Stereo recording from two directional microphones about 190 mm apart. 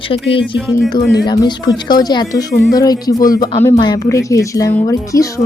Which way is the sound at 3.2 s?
45° left (ahead or behind).